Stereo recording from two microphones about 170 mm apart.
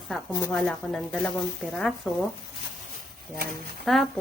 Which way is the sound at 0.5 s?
5° left (ahead or behind).